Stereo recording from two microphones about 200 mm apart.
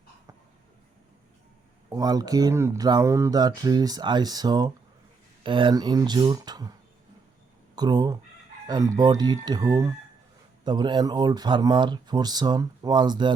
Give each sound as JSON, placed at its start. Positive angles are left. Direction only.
{"t": 1.9, "sound": "speech", "side_deg": -20}
{"t": 7.8, "sound": "speech", "side_deg": -20}